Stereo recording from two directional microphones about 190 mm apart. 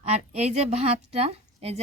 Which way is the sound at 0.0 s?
35° right (ahead or behind).